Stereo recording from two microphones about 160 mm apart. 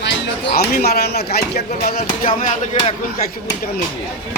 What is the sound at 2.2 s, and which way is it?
Speech, 40° left (ahead or behind).